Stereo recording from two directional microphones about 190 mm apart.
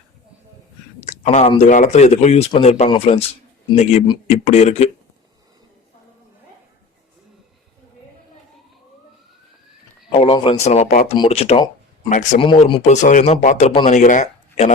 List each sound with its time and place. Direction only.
1.0 s speech: 40° left (ahead or behind)
4.3 s speech: 35° left (ahead or behind)
10.1 s speech: 30° left (ahead or behind)
12.0 s speech: 40° left (ahead or behind)
12.4 s speech: 25° left (ahead or behind)